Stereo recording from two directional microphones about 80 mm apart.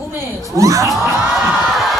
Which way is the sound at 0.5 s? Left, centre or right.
Right.